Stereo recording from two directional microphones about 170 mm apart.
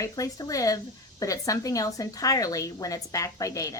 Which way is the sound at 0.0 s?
20° left (ahead or behind).